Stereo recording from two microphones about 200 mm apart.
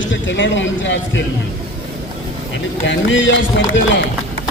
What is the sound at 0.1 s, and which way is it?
Speech, 70° left (ahead or behind).